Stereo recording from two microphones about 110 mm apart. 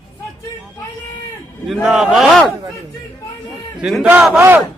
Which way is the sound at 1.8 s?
5° right (ahead or behind).